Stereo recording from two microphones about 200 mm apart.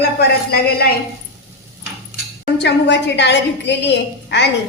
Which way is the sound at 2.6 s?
60° left (ahead or behind).